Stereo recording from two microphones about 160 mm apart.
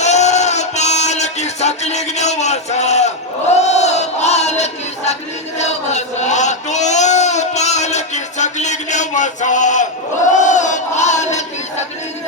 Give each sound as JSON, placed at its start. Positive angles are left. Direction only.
{"t": 0.0, "sound": "music", "side_deg": 45}
{"t": 3.5, "sound": "a sound", "side_deg": 45}
{"t": 10.3, "sound": "battle cry", "side_deg": 50}